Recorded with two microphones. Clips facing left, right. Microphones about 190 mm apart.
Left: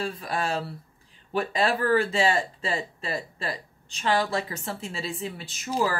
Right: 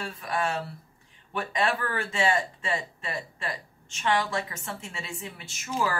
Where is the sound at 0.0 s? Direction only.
35° left (ahead or behind).